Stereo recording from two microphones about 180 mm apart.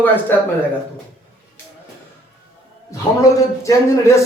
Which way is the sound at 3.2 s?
20° left (ahead or behind).